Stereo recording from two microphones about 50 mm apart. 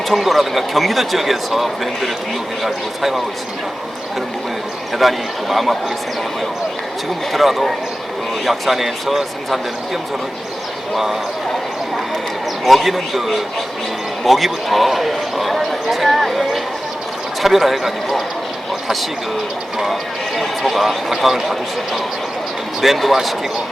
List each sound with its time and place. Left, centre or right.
0.1 s speech: centre
4.9 s speech: centre
7.3 s speech: centre
10.9 s speech: centre
12.6 s speech: centre
19.8 s speech: centre
22.8 s speech: centre